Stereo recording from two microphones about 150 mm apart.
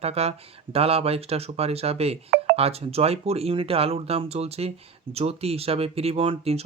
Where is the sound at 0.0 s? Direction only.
45° right (ahead or behind).